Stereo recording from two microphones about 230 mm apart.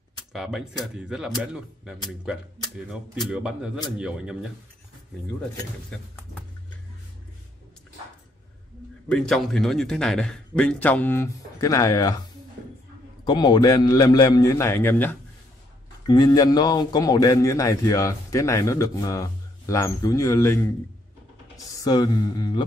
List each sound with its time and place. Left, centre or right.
0.3 s a man's voice: centre
3.3 s a man's voice: centre
9.1 s a man's voice: centre
13.2 s a man's voice: centre